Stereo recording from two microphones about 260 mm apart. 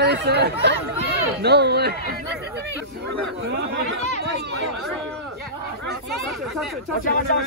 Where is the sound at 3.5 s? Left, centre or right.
Right.